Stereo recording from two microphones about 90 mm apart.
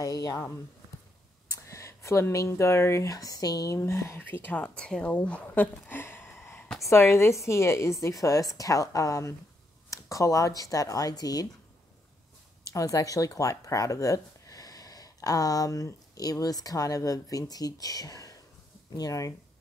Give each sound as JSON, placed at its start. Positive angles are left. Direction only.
{"t": 0.0, "sound": "a woman's voice", "side_deg": 40}
{"t": 1.5, "sound": "a woman's voice", "side_deg": 35}
{"t": 12.7, "sound": "a woman's voice", "side_deg": 40}